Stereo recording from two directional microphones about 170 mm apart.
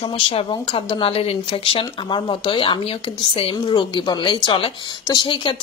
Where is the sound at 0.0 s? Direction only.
35° left (ahead or behind).